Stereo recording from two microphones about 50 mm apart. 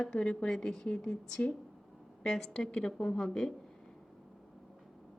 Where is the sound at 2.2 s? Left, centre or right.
Centre.